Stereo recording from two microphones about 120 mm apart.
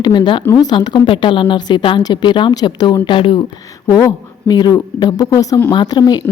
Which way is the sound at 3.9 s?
30° left (ahead or behind).